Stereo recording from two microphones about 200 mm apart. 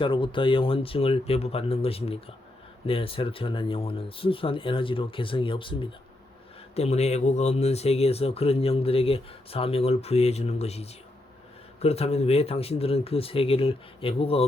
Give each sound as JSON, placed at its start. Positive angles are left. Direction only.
{"t": 0.0, "sound": "speech", "side_deg": 25}